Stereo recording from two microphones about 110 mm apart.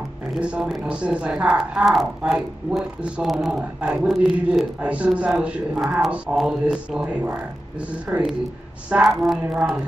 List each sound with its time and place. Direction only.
0.4 s a woman's voice: 10° right (ahead or behind)
8.9 s a woman's voice: 5° right (ahead or behind)